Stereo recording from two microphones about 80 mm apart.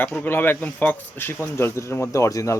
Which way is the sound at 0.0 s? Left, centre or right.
Left.